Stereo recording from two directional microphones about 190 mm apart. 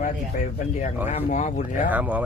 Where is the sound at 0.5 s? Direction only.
40° left (ahead or behind).